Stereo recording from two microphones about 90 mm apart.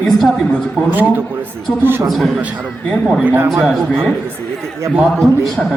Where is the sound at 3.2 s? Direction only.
25° right (ahead or behind).